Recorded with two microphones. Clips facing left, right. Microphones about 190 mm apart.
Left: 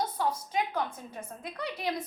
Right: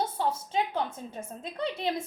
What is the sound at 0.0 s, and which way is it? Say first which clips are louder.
A woman's voice: right 1 dB; 25° right (ahead or behind).